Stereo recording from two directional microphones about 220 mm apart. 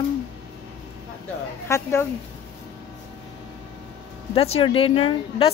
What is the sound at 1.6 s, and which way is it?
Speech, 15° left (ahead or behind).